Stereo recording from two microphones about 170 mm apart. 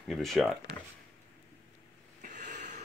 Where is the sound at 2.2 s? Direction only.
45° right (ahead or behind).